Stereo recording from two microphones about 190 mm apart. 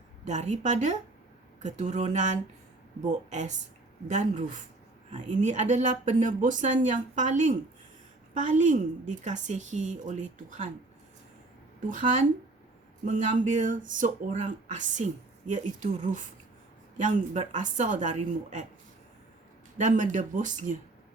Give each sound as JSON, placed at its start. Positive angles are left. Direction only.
{"t": 0.3, "sound": "speech", "side_deg": -40}
{"t": 11.9, "sound": "speech", "side_deg": -40}
{"t": 19.8, "sound": "speech", "side_deg": -40}